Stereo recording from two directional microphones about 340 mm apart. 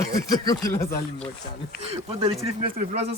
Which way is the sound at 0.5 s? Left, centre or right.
Centre.